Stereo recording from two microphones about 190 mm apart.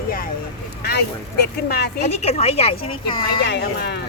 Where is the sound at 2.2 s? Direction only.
35° left (ahead or behind).